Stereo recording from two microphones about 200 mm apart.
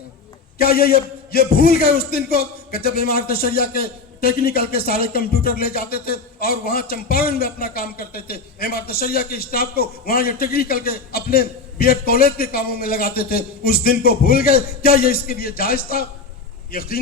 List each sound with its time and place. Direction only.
0.6 s a man's voice: 50° left (ahead or behind)